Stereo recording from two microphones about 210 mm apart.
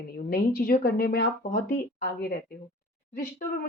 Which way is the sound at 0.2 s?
45° left (ahead or behind).